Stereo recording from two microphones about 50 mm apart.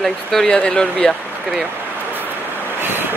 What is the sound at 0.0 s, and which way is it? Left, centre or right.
Speech, centre.